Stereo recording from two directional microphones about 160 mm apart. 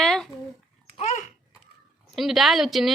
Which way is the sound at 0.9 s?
45° left (ahead or behind).